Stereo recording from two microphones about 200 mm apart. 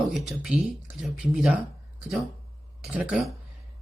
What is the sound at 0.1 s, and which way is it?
Speech, centre (ahead or behind).